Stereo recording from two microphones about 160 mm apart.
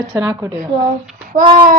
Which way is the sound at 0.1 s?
20° right (ahead or behind).